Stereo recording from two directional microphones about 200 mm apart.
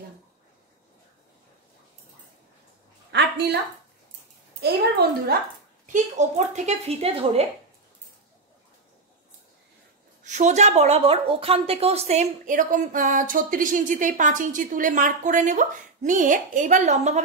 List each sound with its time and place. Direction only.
3.1 s a sound: 60° right (ahead or behind)
5.3 s speech: 50° right (ahead or behind)
5.9 s a woman's voice: 35° right (ahead or behind)
10.2 s a woman's voice: 35° right (ahead or behind)